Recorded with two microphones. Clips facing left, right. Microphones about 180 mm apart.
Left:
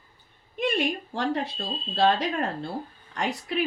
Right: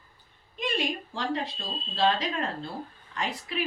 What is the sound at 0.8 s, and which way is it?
A woman's voice, 65° left (ahead or behind).